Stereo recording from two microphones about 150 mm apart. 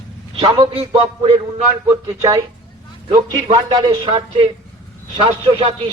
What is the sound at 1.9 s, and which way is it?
Speech, 20° right (ahead or behind).